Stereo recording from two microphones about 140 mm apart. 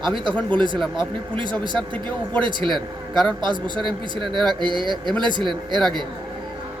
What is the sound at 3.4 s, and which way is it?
A man's voice, 35° right (ahead or behind).